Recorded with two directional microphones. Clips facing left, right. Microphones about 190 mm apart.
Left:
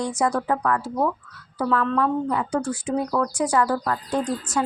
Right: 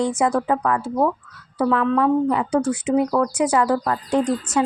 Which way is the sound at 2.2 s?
20° right (ahead or behind).